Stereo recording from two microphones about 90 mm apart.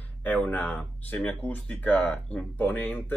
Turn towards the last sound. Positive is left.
turn(degrees=20)  # may be behind; listen again after turning